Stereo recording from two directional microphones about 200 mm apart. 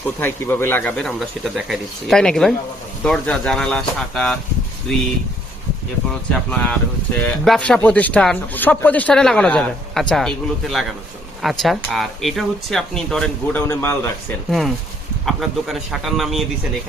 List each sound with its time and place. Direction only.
0.2 s speech: 10° left (ahead or behind)
6.1 s speech: 5° left (ahead or behind)
15.3 s speech: centre (ahead or behind)